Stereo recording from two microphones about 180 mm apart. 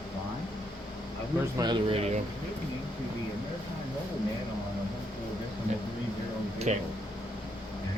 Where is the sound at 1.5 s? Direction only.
25° right (ahead or behind).